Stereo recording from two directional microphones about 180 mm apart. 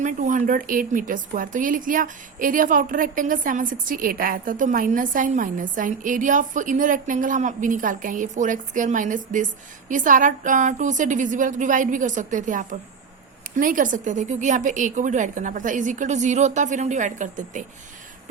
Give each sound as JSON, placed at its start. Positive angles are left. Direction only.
{"t": 0.0, "sound": "a woman's voice", "side_deg": -45}